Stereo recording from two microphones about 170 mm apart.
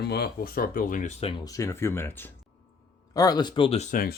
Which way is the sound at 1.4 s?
20° left (ahead or behind).